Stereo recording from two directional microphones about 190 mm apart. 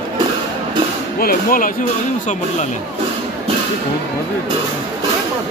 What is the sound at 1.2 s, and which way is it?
Speech, 50° left (ahead or behind).